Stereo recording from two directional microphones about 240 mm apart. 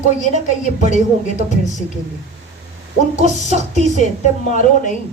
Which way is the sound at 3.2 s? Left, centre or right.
Right.